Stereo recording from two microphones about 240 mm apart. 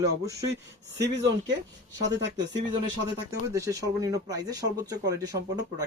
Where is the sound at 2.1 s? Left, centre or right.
Right.